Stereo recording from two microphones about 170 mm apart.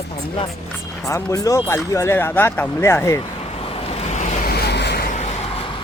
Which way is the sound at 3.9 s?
45° left (ahead or behind).